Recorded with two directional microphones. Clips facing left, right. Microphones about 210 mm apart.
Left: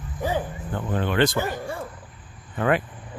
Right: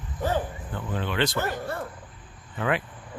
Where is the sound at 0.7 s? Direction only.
50° left (ahead or behind).